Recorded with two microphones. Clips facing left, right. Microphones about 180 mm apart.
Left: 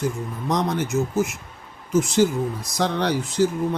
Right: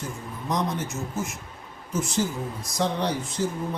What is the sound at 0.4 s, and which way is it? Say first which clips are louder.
Speech: left 4 dB; 75° left (ahead or behind).